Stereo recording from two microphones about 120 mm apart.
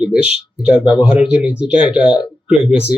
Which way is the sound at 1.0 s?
5° right (ahead or behind).